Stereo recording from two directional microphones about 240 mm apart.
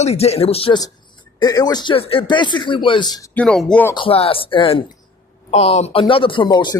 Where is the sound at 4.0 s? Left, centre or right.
Left.